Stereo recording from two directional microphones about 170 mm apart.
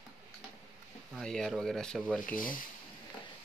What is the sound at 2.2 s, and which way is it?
Speech, 55° left (ahead or behind).